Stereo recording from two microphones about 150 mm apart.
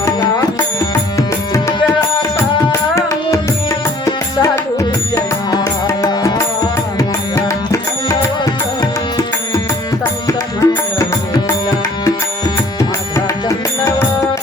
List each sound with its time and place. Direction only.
2.9 s music: 20° left (ahead or behind)
10.2 s music: 20° left (ahead or behind)